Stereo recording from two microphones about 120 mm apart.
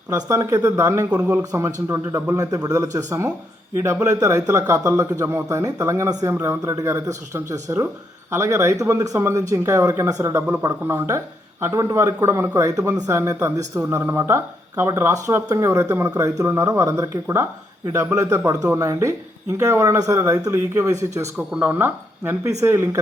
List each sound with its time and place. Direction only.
0.1 s a woman's voice: 25° right (ahead or behind)
1.2 s speech: 15° right (ahead or behind)
1.5 s a woman's voice: 25° right (ahead or behind)
21.3 s a woman's voice: 10° right (ahead or behind)